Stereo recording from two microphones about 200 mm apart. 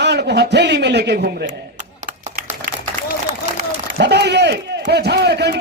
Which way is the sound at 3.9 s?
55° right (ahead or behind).